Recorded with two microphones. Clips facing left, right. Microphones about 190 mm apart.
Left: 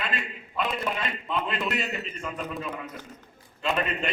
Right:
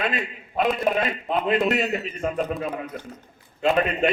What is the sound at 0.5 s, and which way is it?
A man's voice, 50° right (ahead or behind).